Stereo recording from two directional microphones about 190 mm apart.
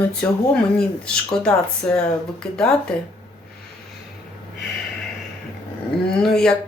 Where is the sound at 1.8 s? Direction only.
5° left (ahead or behind).